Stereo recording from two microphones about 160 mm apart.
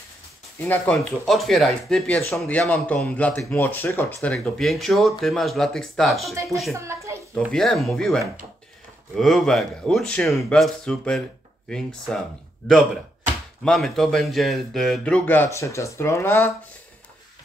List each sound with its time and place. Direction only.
0.6 s a man's voice: 10° left (ahead or behind)
0.9 s speech: centre (ahead or behind)
6.7 s a child's voice: 20° right (ahead or behind)
7.5 s a man's voice: centre (ahead or behind)